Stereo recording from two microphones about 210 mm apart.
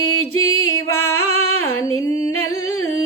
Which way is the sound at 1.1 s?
90° left.